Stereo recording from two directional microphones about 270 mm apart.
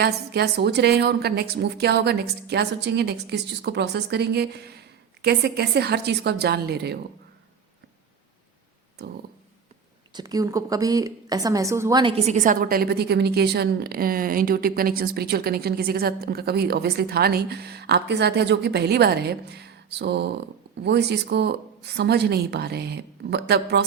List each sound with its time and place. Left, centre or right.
0.0 s a woman's voice: right
9.0 s a woman's voice: right
10.1 s a woman's voice: centre; by 23.8 s right